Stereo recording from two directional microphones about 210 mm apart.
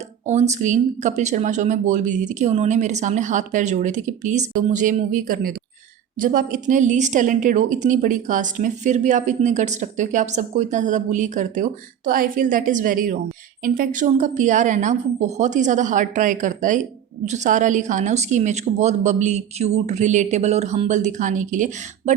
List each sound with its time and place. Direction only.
0.3 s a woman's voice: 35° right (ahead or behind)